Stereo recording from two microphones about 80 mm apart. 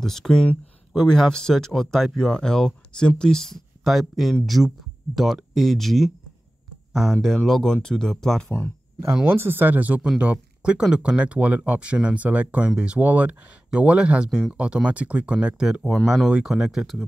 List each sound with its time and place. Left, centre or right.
0.0 s speech: centre
8.5 s speech: left
9.3 s speech: right; by 17.0 s centre